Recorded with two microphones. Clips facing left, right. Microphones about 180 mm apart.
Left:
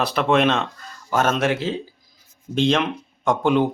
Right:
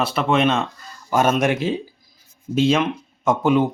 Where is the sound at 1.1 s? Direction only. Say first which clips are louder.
Right 2 dB; 10° right (ahead or behind).